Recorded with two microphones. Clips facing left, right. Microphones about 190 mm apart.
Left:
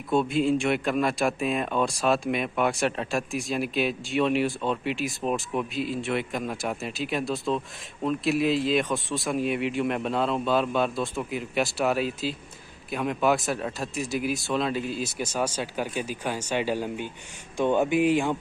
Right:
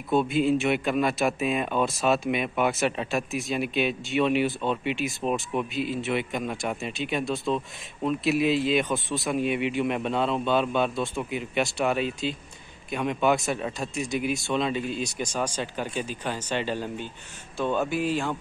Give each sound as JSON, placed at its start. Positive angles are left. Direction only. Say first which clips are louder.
{"t": 0.1, "sound": "speech", "louder": "even", "side_deg": 0}